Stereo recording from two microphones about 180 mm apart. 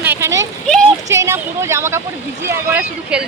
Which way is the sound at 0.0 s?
10° right (ahead or behind).